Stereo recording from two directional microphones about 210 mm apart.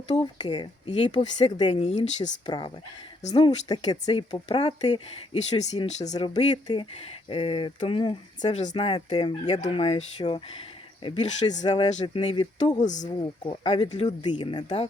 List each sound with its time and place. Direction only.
0.2 s speech: 20° left (ahead or behind)
2.5 s speech: 20° left (ahead or behind)
11.6 s speech: 25° left (ahead or behind)
12.5 s speech: 35° left (ahead or behind)
13.1 s speech: 20° left (ahead or behind)